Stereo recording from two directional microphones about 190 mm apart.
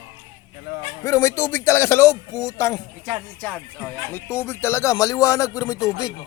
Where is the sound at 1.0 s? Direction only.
15° left (ahead or behind).